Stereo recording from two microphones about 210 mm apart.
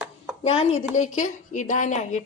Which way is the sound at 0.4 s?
30° left (ahead or behind).